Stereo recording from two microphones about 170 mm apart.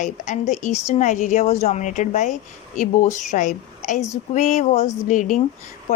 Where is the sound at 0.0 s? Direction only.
45° left (ahead or behind).